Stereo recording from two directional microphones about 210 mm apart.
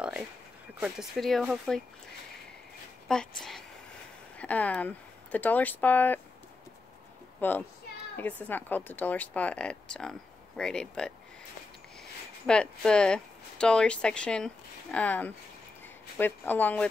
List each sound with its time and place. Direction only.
0.7 s speech: 5° right (ahead or behind)
3.1 s speech: 5° left (ahead or behind)
4.4 s a woman's voice: 5° left (ahead or behind)
7.3 s a woman's voice: 10° left (ahead or behind)
12.4 s a woman's voice: 5° left (ahead or behind)